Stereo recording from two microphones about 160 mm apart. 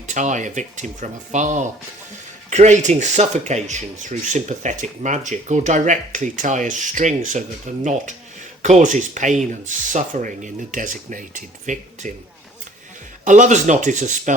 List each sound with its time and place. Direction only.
0.1 s speech: 50° right (ahead or behind)
13.2 s speech: 50° right (ahead or behind)